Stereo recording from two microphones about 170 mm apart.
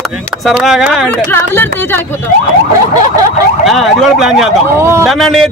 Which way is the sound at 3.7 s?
Centre (ahead or behind).